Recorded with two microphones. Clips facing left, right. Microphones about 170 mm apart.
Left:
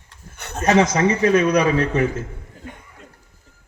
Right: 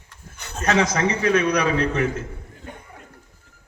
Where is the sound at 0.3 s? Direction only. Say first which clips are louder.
Left 4 dB; 60° left (ahead or behind).